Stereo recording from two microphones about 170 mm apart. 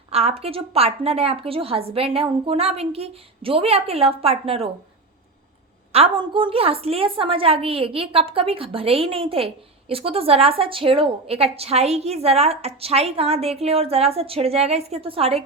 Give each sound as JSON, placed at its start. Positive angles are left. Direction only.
{"t": 0.1, "sound": "a woman's voice", "side_deg": -35}
{"t": 5.9, "sound": "a woman's voice", "side_deg": -35}